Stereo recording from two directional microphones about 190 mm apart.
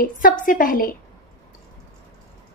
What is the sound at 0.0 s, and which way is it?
Speech, 45° left (ahead or behind).